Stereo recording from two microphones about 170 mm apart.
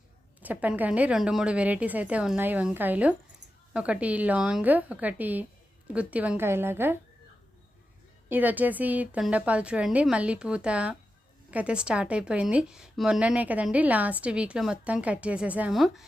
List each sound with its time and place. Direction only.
0.4 s a woman's voice: 10° right (ahead or behind)
8.3 s a woman's voice: 10° right (ahead or behind)